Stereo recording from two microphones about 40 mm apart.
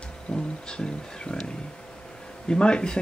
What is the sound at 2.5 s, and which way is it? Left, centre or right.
Speech, left.